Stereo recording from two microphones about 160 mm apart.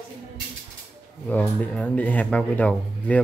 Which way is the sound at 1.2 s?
5° left (ahead or behind).